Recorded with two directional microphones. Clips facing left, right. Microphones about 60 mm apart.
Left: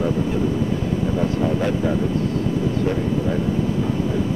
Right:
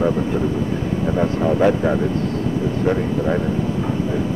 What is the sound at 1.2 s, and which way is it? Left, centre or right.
Speech, right.